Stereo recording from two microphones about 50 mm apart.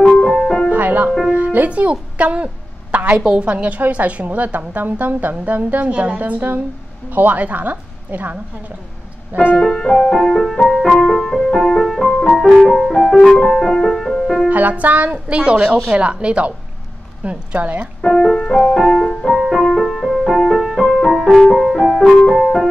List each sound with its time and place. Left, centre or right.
0.2 s music: centre
0.7 s music: right
3.3 s a woman's voice: centre
9.6 s music: centre
14.5 s a woman's voice: right
18.0 s speech: centre
18.9 s music: centre
19.3 s music: centre